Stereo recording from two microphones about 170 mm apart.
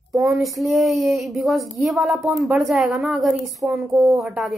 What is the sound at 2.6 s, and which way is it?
Speech, centre (ahead or behind).